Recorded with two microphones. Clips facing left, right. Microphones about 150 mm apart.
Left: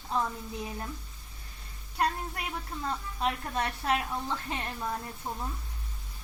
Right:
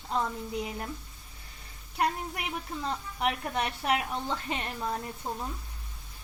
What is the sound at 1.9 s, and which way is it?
A woman's voice, 15° right (ahead or behind).